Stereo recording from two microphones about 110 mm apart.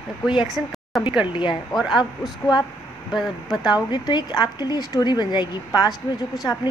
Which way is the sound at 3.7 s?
40° left (ahead or behind).